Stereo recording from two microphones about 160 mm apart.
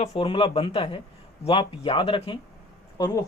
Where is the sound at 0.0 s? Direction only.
35° left (ahead or behind).